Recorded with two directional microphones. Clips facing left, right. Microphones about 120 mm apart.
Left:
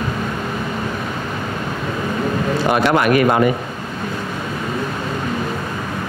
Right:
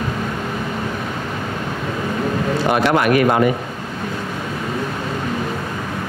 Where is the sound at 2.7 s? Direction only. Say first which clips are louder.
Left 1 dB; 25° left (ahead or behind).